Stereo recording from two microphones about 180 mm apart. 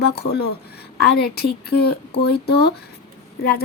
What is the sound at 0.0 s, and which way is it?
Speech, 65° left (ahead or behind).